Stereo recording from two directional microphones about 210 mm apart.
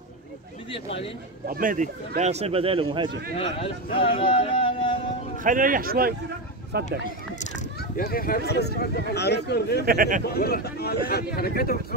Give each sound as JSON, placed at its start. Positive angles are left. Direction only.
{"t": 1.5, "sound": "speech", "side_deg": -40}
{"t": 3.6, "sound": "speech", "side_deg": 25}
{"t": 5.4, "sound": "speech", "side_deg": -40}
{"t": 7.9, "sound": "speech", "side_deg": 45}
{"t": 9.8, "sound": "speech", "side_deg": -40}
{"t": 10.2, "sound": "speech", "side_deg": 50}